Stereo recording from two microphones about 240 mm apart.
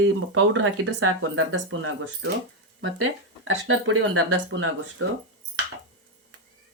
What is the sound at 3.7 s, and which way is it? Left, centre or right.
Speech, right.